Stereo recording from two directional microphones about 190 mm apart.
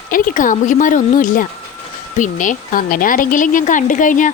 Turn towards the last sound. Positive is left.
turn(degrees=45)  # may be behind; listen again after turning